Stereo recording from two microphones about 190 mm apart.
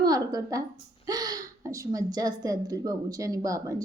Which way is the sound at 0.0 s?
20° right (ahead or behind).